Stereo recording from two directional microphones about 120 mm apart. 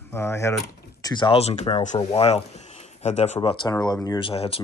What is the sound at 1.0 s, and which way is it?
Speech, 40° left (ahead or behind).